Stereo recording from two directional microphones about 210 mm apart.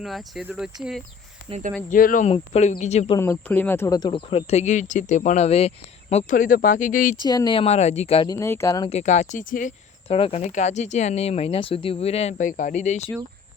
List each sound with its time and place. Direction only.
0.0 s speech: centre (ahead or behind)
1.5 s speech: 30° right (ahead or behind)
1.9 s speech: 40° left (ahead or behind)
3.2 s speech: 10° left (ahead or behind); by 7.2 s 40° left (ahead or behind)
7.3 s speech: 20° left (ahead or behind)
8.9 s speech: 30° left (ahead or behind)
10.1 s speech: 25° left (ahead or behind)